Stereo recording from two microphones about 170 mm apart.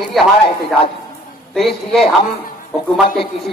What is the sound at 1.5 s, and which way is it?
Speech, centre (ahead or behind).